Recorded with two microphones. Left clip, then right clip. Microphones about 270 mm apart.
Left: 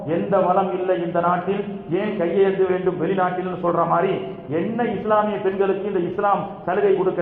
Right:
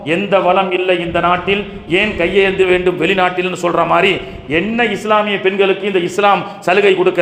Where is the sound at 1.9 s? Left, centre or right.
Right.